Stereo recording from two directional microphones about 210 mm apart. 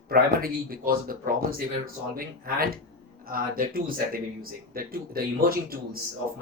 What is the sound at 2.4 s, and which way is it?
Speech, 45° right (ahead or behind).